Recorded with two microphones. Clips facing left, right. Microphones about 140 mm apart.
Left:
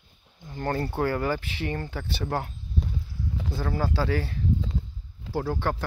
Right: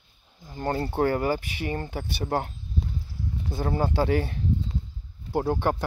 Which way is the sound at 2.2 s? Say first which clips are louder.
Right 3 dB; 30° right (ahead or behind).